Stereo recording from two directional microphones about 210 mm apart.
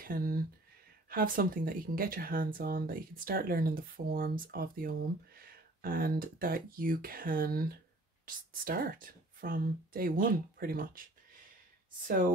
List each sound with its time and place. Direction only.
0.0 s speech: 45° right (ahead or behind)